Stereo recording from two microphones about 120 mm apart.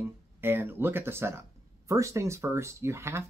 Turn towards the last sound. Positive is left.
turn(degrees=-20)  # may be behind; listen again after turning